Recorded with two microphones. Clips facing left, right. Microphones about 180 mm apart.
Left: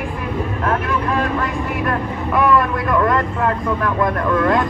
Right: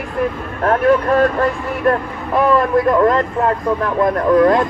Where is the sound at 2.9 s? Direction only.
30° right (ahead or behind).